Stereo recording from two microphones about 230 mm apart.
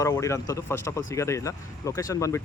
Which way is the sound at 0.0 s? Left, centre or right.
Centre.